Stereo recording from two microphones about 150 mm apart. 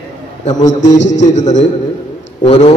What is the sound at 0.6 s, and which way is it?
A man's voice, 55° left (ahead or behind).